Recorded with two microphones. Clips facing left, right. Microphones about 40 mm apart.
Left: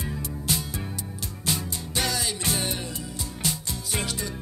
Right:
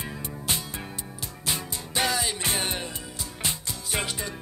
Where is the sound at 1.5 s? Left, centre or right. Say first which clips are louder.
Left 1 dB; centre.